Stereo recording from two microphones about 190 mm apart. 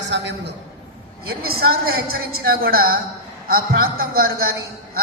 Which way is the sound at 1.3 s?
55° right (ahead or behind).